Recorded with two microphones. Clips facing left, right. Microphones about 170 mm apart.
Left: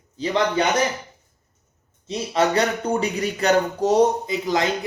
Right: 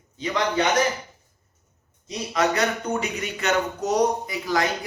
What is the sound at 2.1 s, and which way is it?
Speech, 30° left (ahead or behind).